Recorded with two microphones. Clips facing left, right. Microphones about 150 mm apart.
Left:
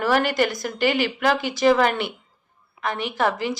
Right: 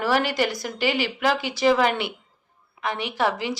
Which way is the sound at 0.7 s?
50° left (ahead or behind).